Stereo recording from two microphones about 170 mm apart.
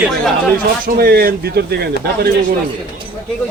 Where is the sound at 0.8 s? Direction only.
65° right (ahead or behind).